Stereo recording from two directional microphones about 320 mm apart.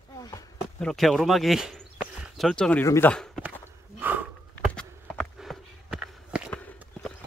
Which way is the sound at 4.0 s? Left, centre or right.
Centre.